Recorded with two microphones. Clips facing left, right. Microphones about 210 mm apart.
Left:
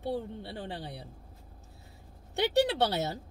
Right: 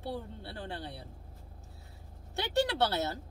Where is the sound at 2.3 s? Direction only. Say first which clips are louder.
Left 4 dB; 15° left (ahead or behind).